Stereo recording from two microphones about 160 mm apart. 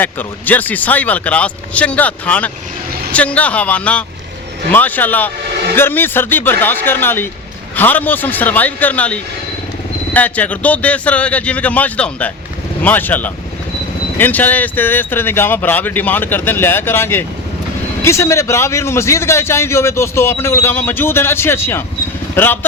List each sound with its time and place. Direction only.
0.0 s a man's voice: 10° left (ahead or behind)